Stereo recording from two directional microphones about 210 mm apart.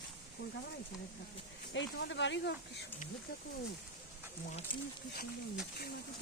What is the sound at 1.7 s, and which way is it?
Speech, 60° left (ahead or behind).